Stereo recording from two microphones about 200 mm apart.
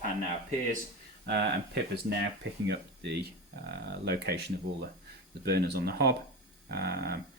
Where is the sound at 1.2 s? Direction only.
55° right (ahead or behind).